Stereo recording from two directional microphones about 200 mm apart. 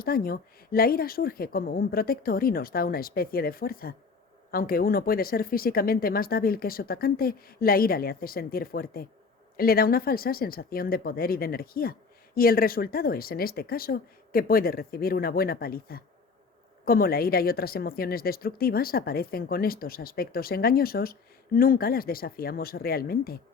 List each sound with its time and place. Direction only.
0.0 s a woman's voice: 45° left (ahead or behind)